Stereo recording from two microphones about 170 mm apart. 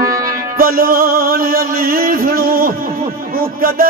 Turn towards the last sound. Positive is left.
turn(degrees=-60)  # may be behind; listen again after turning